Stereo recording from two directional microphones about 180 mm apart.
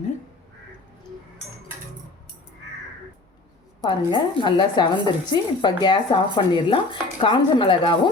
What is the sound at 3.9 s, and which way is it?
A woman's voice, 25° left (ahead or behind).